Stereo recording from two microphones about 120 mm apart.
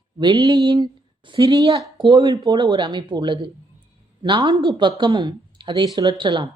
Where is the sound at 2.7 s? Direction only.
40° right (ahead or behind).